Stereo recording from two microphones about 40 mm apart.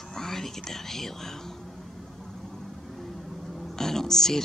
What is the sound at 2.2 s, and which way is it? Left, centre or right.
Vehicle, centre.